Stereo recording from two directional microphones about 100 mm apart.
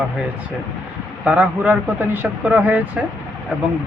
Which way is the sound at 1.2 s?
15° right (ahead or behind).